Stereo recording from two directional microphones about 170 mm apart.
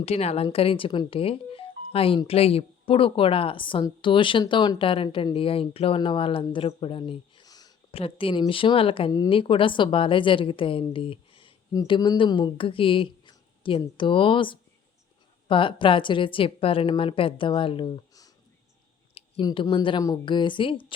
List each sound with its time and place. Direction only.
0.0 s speech: 35° left (ahead or behind)
11.7 s speech: 20° left (ahead or behind)